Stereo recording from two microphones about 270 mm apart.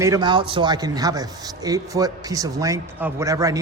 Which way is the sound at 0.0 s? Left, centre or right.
Centre.